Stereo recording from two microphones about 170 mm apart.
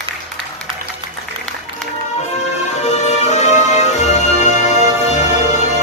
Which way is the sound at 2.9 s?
40° left (ahead or behind).